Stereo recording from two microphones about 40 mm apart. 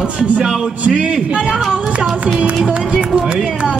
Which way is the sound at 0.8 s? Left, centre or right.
Right.